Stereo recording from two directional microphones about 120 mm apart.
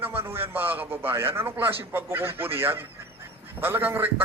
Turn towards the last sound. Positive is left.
turn(degrees=-15)  # may be behind; listen again after turning